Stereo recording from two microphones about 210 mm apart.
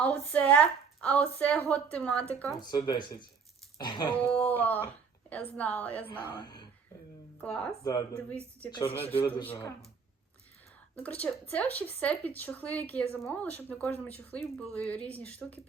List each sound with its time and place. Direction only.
0.0 s a woman's voice: 5° left (ahead or behind)
2.6 s speech: 20° left (ahead or behind)
4.2 s a woman's voice: 5° left (ahead or behind)
6.1 s speech: 20° left (ahead or behind)
7.4 s speech: 5° left (ahead or behind)
7.9 s a woman's voice: 20° left (ahead or behind)
11.0 s a woman's voice: 5° left (ahead or behind)